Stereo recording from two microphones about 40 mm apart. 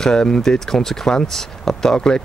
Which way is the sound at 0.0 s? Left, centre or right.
Centre.